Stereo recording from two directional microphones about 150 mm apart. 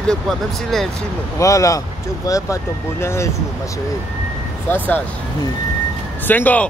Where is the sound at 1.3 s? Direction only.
20° left (ahead or behind).